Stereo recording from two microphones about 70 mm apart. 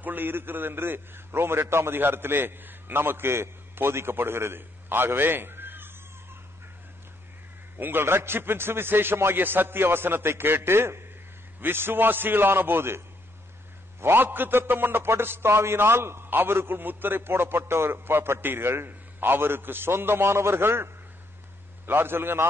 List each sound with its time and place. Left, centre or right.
0.0 s a man's voice: right
7.7 s a man's voice: right
14.0 s a man's voice: right